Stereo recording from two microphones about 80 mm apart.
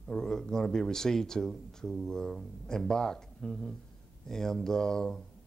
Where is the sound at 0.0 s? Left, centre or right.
Centre.